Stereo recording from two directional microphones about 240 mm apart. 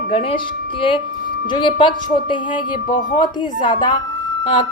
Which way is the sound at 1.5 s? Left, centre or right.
Centre.